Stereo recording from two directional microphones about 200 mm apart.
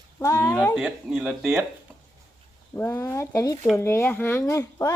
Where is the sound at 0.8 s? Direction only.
5° right (ahead or behind).